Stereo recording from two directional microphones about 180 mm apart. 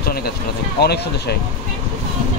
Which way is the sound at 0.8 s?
65° left (ahead or behind).